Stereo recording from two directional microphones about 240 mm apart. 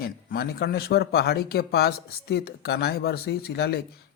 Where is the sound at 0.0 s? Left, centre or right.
Left.